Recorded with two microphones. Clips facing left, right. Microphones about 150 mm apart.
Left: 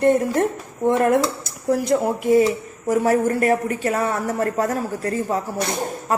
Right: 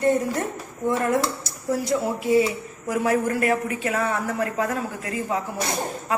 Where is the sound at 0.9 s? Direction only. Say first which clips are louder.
Left 5 dB; 60° left (ahead or behind).